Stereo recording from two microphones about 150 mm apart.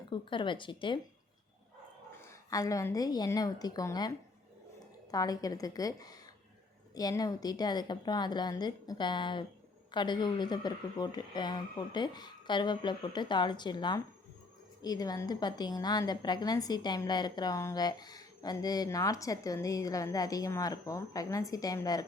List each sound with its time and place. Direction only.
0.1 s speech: 35° left (ahead or behind)
2.5 s a woman's voice: 20° left (ahead or behind)
5.1 s a woman's voice: 25° left (ahead or behind)